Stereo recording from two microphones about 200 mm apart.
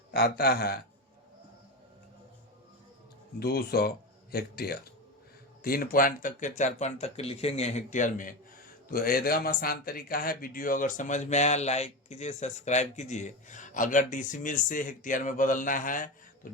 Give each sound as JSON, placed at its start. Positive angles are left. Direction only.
{"t": 0.1, "sound": "speech", "side_deg": 50}
{"t": 3.4, "sound": "speech", "side_deg": 50}